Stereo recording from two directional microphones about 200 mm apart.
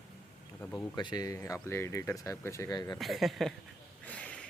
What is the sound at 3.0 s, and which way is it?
Speech, centre (ahead or behind).